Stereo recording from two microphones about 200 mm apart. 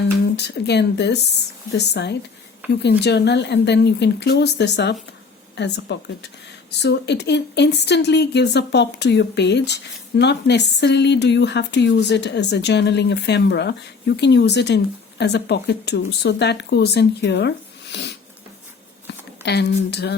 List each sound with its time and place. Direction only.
0.3 s speech: 55° left (ahead or behind)
17.9 s a sound: 60° left (ahead or behind)
19.0 s speech: 55° left (ahead or behind)